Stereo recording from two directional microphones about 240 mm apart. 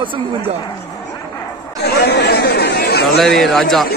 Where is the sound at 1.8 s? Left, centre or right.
Left.